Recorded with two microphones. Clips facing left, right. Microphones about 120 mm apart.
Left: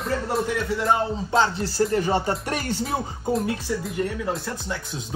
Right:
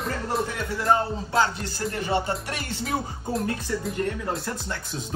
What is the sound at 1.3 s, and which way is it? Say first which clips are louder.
Music: left 2 dB; 25° left (ahead or behind).